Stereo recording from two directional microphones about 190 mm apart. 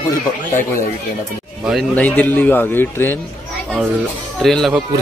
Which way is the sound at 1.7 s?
5° left (ahead or behind).